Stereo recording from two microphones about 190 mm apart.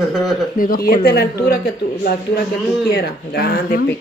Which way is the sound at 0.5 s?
50° left (ahead or behind).